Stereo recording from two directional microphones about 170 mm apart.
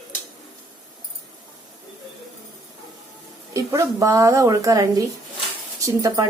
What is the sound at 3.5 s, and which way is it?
Speech, 20° right (ahead or behind).